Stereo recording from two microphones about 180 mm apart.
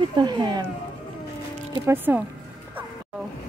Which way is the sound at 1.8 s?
10° right (ahead or behind).